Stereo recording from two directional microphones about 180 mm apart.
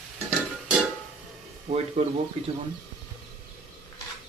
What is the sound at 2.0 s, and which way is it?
Speech, 30° right (ahead or behind).